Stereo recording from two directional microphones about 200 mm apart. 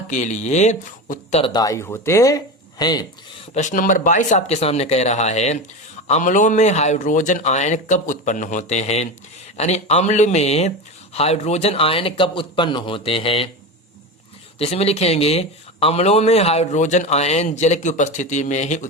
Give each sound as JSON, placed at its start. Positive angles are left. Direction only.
{"t": 0.1, "sound": "a man's voice", "side_deg": 35}
{"t": 1.4, "sound": "a man's voice", "side_deg": 20}
{"t": 14.6, "sound": "a man's voice", "side_deg": 30}